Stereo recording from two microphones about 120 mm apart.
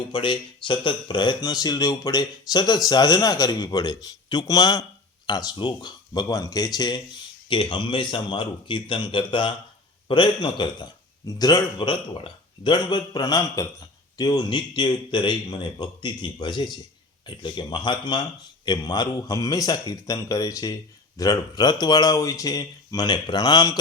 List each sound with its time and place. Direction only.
0.1 s speech: 45° left (ahead or behind)